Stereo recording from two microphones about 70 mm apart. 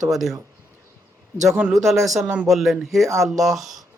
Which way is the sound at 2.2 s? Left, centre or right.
Centre.